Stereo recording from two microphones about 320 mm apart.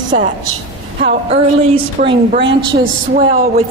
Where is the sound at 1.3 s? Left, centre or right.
Centre.